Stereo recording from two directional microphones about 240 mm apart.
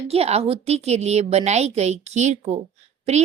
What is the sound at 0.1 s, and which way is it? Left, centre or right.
A woman's voice, right.